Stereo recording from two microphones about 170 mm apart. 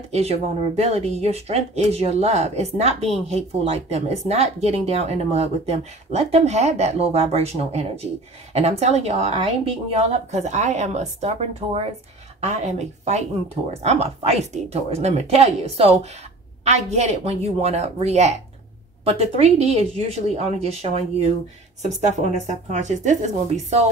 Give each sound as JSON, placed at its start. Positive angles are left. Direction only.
{"t": 0.1, "sound": "speech", "side_deg": -40}